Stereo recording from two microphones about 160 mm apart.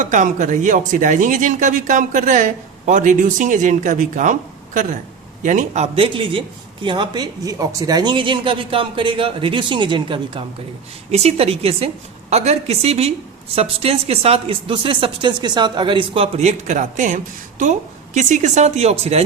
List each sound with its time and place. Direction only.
0.0 s a woman's voice: 50° right (ahead or behind); by 10.4 s 30° right (ahead or behind)
11.1 s speech: 40° right (ahead or behind)